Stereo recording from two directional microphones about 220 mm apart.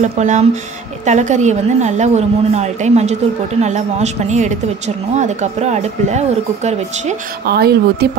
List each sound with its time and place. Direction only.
0.0 s speech: 30° right (ahead or behind)
7.4 s a woman's voice: 45° right (ahead or behind)